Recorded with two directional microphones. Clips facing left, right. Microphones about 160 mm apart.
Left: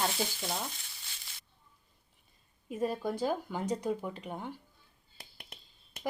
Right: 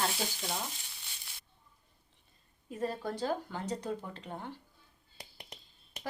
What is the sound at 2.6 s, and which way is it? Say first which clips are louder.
Speech: left 3 dB; 15° left (ahead or behind).